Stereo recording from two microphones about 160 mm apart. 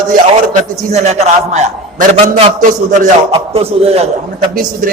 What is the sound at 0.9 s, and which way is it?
A man's voice, 45° right (ahead or behind).